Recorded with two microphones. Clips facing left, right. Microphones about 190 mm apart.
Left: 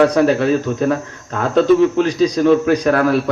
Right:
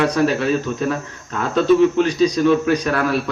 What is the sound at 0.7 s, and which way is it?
Speech, 40° left (ahead or behind).